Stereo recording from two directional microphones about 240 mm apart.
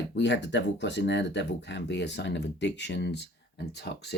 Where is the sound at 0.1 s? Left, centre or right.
Left.